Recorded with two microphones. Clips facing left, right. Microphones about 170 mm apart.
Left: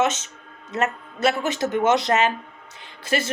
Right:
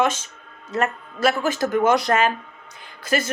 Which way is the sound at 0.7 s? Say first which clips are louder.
Right 1 dB; 25° left (ahead or behind).